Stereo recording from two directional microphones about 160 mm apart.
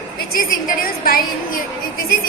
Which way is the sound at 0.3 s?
65° left (ahead or behind).